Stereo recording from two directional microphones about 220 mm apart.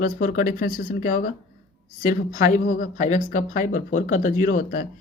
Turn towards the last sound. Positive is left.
turn(degrees=40)  # may be behind; listen again after turning